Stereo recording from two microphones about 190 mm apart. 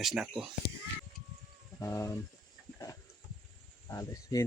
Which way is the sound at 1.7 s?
15° left (ahead or behind).